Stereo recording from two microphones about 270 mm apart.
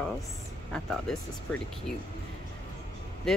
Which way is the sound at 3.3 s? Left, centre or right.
Centre.